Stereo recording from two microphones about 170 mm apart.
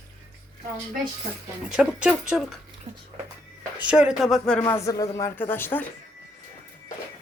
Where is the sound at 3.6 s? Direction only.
10° right (ahead or behind).